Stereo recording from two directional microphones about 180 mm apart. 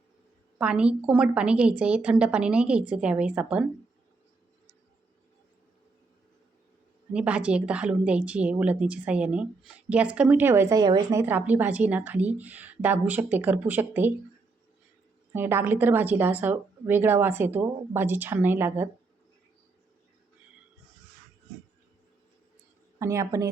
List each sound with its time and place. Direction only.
0.6 s a woman's voice: 5° right (ahead or behind)
7.1 s a woman's voice: 5° right (ahead or behind)
15.3 s a woman's voice: 10° right (ahead or behind)
23.0 s a woman's voice: 15° right (ahead or behind)